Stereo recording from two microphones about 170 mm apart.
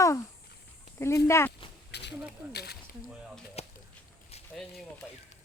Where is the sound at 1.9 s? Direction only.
90° left.